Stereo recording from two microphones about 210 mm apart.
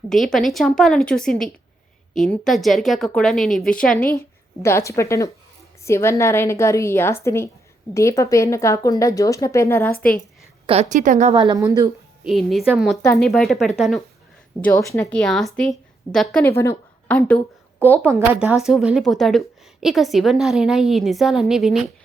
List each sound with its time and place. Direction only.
0.1 s speech: centre (ahead or behind)
4.6 s a woman's voice: 15° left (ahead or behind)
10.7 s a woman's voice: 30° right (ahead or behind)
11.3 s a woman's voice: 15° right (ahead or behind)
12.2 s a woman's voice: centre (ahead or behind)
17.8 s speech: 10° right (ahead or behind)